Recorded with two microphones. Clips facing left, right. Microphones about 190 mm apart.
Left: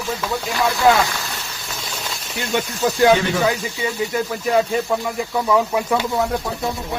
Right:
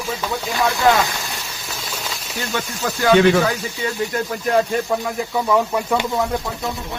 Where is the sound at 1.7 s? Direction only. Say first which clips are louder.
Even; 5° right (ahead or behind).